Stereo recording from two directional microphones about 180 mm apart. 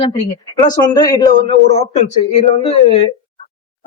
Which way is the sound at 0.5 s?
20° left (ahead or behind).